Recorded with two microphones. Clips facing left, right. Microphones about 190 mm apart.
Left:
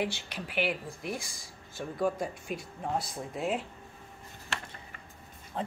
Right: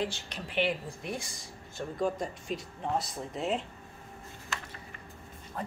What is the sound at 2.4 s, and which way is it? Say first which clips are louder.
Speech: right 1 dB; 55° left (ahead or behind).